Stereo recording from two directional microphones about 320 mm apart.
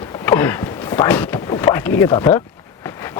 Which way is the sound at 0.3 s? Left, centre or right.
Centre.